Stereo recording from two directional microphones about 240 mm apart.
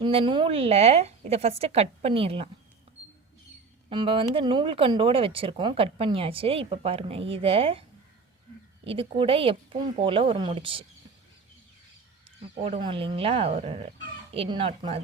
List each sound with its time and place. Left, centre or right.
0.0 s speech: right
3.8 s speech: right
12.5 s speech: right